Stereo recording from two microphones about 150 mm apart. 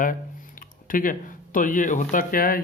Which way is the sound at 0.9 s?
65° left (ahead or behind).